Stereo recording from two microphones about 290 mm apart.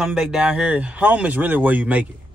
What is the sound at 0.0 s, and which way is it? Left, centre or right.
Speech, centre.